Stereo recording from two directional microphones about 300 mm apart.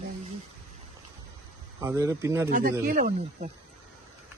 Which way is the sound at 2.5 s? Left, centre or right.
Right.